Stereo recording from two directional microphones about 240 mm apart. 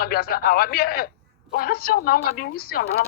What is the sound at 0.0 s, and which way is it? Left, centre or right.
Speech, left.